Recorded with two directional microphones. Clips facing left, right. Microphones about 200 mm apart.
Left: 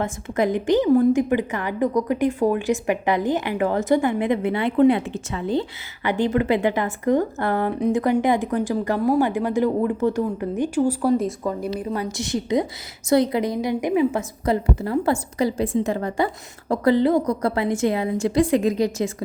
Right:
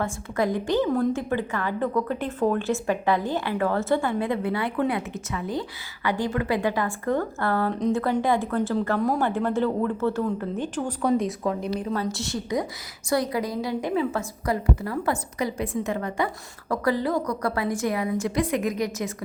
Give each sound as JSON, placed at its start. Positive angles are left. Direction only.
{"t": 0.0, "sound": "a woman's voice", "side_deg": 20}
{"t": 12.1, "sound": "a woman's voice", "side_deg": 20}